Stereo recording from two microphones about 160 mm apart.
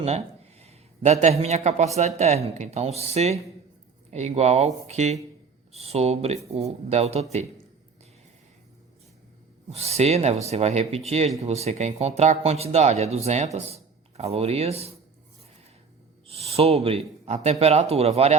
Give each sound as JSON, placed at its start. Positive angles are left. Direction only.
{"t": 0.6, "sound": "speech", "side_deg": -40}
{"t": 9.6, "sound": "speech", "side_deg": -40}
{"t": 16.2, "sound": "speech", "side_deg": -40}